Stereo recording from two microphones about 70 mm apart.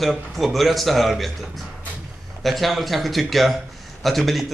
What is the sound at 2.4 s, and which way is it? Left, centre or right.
A man's voice, centre.